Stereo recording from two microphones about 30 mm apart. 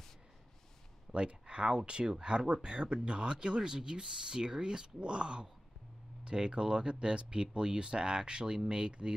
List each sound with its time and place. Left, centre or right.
1.1 s speech: right